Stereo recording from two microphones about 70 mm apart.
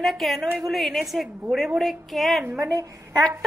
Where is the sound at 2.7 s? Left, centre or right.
Right.